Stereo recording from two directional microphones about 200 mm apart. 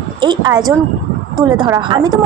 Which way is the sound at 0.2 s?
20° right (ahead or behind).